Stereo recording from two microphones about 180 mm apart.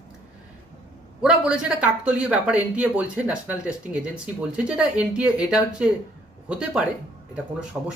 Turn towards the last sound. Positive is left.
turn(degrees=-5)  # may be behind; listen again after turning